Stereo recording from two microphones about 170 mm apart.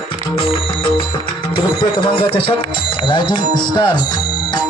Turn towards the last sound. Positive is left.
turn(degrees=25)  # may be behind; listen again after turning